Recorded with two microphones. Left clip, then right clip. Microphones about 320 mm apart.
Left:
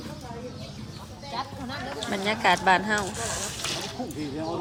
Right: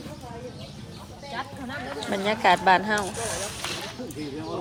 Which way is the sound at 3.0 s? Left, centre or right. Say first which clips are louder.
Right 1 dB; centre.